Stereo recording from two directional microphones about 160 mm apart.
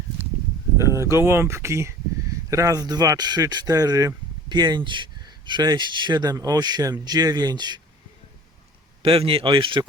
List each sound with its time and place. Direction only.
1.1 s speech: 15° right (ahead or behind)
9.0 s speech: 35° right (ahead or behind)